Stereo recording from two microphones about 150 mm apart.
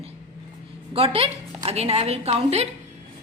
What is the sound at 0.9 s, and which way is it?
A woman's voice, 40° right (ahead or behind).